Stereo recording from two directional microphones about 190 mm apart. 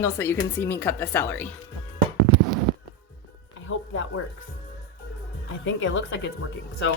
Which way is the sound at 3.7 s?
90° left.